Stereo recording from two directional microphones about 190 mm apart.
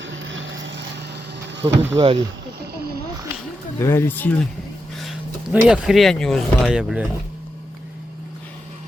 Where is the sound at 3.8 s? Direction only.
15° left (ahead or behind).